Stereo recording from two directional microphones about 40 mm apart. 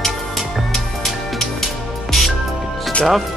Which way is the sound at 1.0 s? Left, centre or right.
Centre.